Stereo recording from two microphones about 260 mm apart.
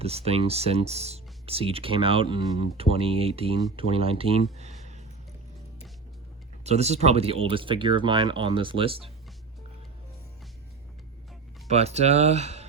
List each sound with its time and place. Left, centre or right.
0.0 s speech: right
4.5 s a sound: right
6.7 s speech: right
11.7 s speech: right